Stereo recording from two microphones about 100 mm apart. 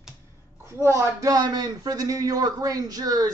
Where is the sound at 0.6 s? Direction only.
30° right (ahead or behind).